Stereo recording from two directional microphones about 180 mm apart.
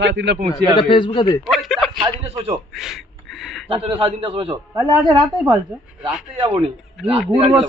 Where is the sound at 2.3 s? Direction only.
35° right (ahead or behind).